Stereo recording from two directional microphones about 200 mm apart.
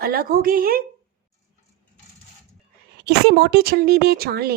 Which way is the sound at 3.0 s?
55° right (ahead or behind).